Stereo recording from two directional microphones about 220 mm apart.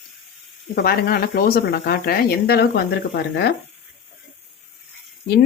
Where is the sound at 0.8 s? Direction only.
45° left (ahead or behind).